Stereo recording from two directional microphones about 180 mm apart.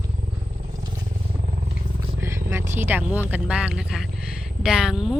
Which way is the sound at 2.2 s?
15° right (ahead or behind).